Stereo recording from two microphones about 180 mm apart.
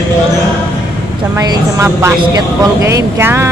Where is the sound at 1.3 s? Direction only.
20° right (ahead or behind).